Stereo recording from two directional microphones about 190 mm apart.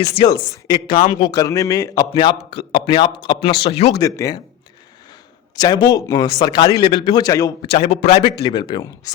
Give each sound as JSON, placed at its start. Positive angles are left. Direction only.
{"t": 0.0, "sound": "a man's voice", "side_deg": 20}
{"t": 3.9, "sound": "a man's voice", "side_deg": 20}
{"t": 5.5, "sound": "a man's voice", "side_deg": 20}
{"t": 7.8, "sound": "a man's voice", "side_deg": 35}
{"t": 8.1, "sound": "a man's voice", "side_deg": 25}